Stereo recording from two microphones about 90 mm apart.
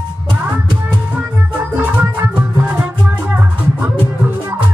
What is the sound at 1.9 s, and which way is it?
Music, 20° right (ahead or behind).